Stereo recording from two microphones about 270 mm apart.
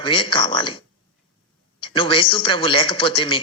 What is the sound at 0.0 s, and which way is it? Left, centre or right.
Speech, centre.